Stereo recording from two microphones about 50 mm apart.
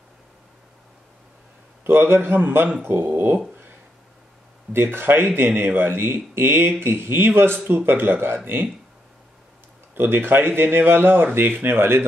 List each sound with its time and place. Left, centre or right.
1.9 s a man's voice: right
4.7 s a man's voice: right
9.9 s a man's voice: right